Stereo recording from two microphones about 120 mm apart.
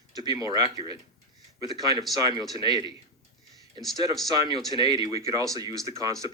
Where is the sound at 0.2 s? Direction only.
35° right (ahead or behind).